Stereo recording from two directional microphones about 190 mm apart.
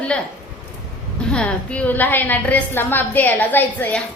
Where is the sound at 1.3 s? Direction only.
5° left (ahead or behind).